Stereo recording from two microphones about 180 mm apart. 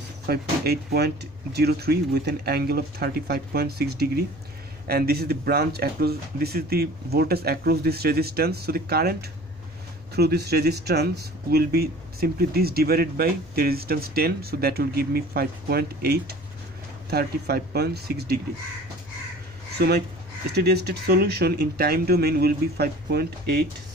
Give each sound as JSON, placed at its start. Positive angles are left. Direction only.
{"t": 0.3, "sound": "speech", "side_deg": -60}
{"t": 10.1, "sound": "speech", "side_deg": -65}
{"t": 19.8, "sound": "speech", "side_deg": -60}